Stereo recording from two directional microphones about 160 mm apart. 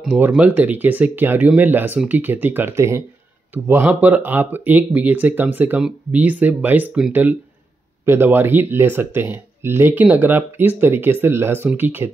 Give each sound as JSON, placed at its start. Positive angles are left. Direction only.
{"t": 0.0, "sound": "speech", "side_deg": -5}